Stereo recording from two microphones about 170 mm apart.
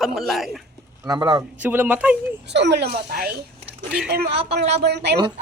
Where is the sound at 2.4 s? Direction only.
90° right; by 3.3 s 60° right (ahead or behind).